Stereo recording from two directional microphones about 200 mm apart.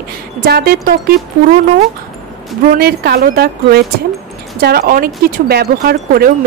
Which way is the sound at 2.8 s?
50° right (ahead or behind).